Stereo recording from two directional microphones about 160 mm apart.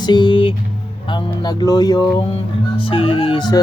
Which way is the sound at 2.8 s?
35° left (ahead or behind).